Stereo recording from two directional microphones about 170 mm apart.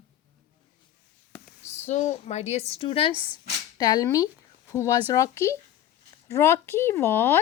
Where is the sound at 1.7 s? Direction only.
45° left (ahead or behind).